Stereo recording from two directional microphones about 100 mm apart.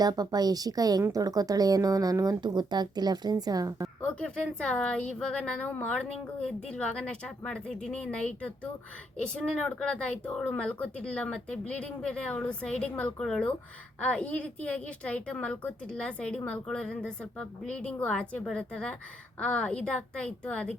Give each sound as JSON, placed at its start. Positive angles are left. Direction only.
{"t": 0.0, "sound": "speech", "side_deg": -40}
{"t": 4.0, "sound": "speech", "side_deg": 10}